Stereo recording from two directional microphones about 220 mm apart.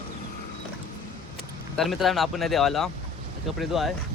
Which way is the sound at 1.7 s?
Centre (ahead or behind).